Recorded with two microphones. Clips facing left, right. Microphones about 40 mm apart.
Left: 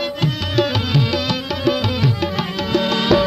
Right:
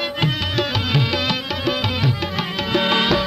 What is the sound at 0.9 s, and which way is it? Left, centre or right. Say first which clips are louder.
Music: left 1 dB; centre.